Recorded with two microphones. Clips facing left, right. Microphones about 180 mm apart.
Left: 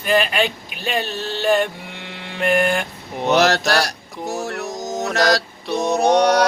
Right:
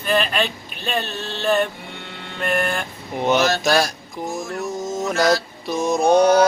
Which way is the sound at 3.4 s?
75° left (ahead or behind).